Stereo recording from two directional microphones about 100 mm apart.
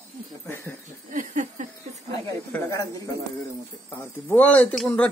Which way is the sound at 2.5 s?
30° left (ahead or behind).